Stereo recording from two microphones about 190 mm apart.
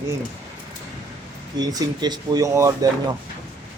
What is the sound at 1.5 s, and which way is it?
Speech, 20° right (ahead or behind).